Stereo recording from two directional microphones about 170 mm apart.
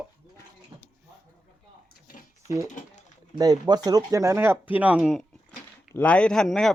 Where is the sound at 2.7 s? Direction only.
45° left (ahead or behind).